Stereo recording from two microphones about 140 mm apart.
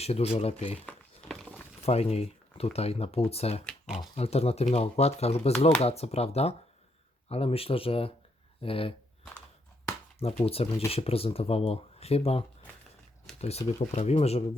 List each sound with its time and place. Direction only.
0.0 s speech: 45° left (ahead or behind)
0.9 s a sound: 5° left (ahead or behind)
1.9 s speech: 50° left (ahead or behind)
3.8 s speech: 5° right (ahead or behind)
4.1 s speech: 50° left (ahead or behind)
10.4 s speech: 45° left (ahead or behind)